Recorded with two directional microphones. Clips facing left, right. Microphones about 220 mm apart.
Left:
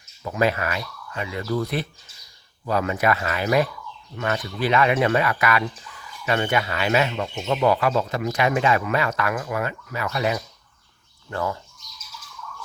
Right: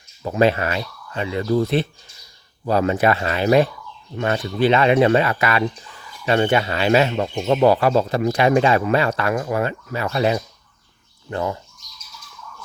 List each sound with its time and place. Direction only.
0.3 s speech: 30° right (ahead or behind)